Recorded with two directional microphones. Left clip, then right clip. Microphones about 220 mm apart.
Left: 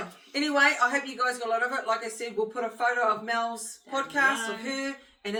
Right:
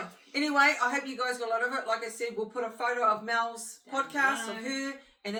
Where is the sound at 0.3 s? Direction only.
10° right (ahead or behind).